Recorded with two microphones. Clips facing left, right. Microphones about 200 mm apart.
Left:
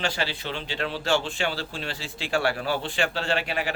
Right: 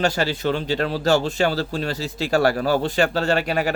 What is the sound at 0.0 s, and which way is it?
Speech, 45° right (ahead or behind).